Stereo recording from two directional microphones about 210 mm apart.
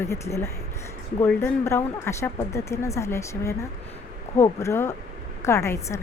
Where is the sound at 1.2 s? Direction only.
10° left (ahead or behind).